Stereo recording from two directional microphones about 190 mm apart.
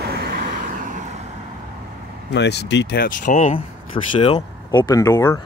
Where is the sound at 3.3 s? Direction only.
40° left (ahead or behind).